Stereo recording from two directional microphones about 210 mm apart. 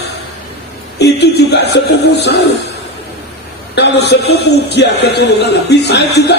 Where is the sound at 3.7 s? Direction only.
50° left (ahead or behind).